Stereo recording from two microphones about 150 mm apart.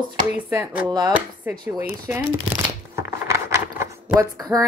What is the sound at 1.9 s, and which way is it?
Speech, 10° right (ahead or behind).